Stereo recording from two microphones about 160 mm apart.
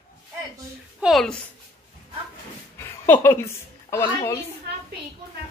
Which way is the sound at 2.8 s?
15° left (ahead or behind).